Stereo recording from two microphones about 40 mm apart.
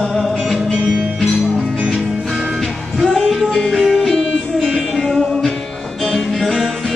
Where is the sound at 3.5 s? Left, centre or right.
Centre.